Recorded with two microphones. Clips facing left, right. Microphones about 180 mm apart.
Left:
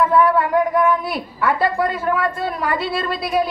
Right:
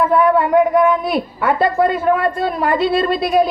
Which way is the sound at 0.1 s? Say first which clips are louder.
Right 3 dB; 20° right (ahead or behind).